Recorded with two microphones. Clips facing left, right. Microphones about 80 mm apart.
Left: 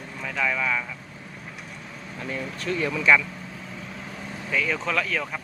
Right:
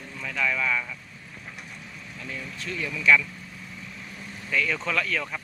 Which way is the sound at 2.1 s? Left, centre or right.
Left.